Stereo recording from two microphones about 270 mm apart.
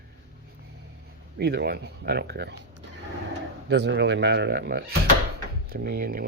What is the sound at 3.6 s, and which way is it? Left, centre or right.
Speech, right.